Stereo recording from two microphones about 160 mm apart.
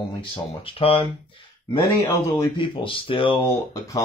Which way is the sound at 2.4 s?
30° left (ahead or behind).